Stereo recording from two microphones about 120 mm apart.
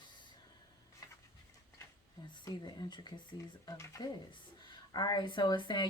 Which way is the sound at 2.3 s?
35° left (ahead or behind).